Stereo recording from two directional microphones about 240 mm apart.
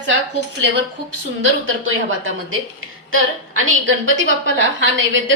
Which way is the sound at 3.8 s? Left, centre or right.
Right.